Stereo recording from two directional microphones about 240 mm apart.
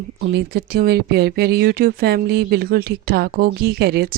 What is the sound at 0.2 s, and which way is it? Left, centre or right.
Speech, right.